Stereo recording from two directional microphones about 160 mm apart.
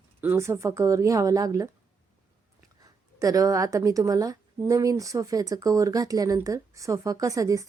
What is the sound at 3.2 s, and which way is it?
A woman's voice, 20° right (ahead or behind).